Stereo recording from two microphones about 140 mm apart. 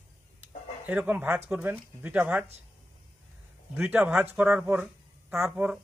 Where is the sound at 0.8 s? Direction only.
10° right (ahead or behind).